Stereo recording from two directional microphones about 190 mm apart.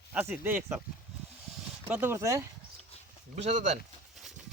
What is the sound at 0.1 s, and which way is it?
Speech, 10° right (ahead or behind).